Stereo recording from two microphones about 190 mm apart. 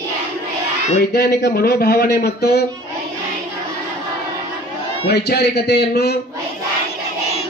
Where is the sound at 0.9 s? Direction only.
55° left (ahead or behind).